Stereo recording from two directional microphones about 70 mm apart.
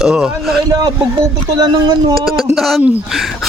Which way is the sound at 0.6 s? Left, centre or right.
Right.